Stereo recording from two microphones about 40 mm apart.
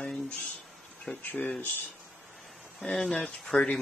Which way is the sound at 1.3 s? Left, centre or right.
Left.